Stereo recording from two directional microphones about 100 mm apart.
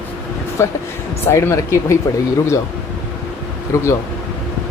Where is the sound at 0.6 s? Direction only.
25° left (ahead or behind).